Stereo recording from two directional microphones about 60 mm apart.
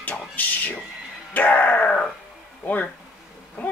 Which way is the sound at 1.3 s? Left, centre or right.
Left.